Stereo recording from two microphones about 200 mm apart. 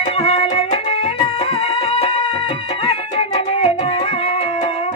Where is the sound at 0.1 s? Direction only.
30° left (ahead or behind).